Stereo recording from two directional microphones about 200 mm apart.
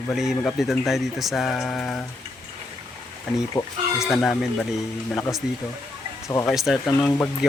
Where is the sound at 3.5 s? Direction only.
20° left (ahead or behind).